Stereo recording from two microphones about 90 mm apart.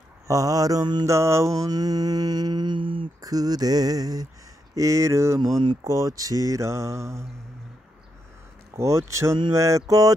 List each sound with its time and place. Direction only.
0.3 s mantra: 40° right (ahead or behind)
1.0 s mantra: 30° right (ahead or behind); by 3.1 s 70° right (ahead or behind)
3.2 s mantra: 45° right (ahead or behind)
8.7 s mantra: 35° right (ahead or behind)